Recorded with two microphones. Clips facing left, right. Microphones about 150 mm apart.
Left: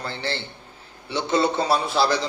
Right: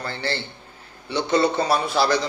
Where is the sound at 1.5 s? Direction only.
25° left (ahead or behind).